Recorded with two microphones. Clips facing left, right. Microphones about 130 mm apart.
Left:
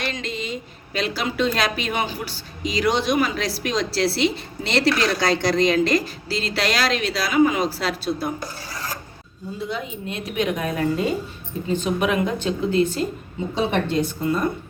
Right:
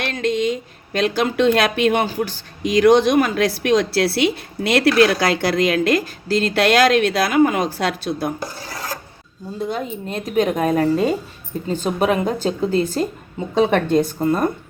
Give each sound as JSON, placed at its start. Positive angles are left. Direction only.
{"t": 0.0, "sound": "a woman's voice", "side_deg": -55}
{"t": 9.6, "sound": "a woman's voice", "side_deg": -45}
{"t": 13.5, "sound": "a woman's voice", "side_deg": -50}